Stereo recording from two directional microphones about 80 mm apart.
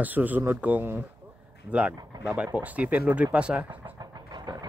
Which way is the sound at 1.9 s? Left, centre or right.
Right.